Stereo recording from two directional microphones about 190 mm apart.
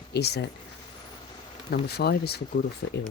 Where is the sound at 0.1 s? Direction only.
60° left (ahead or behind).